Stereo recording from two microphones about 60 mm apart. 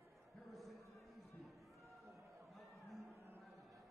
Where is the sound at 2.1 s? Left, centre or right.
Right.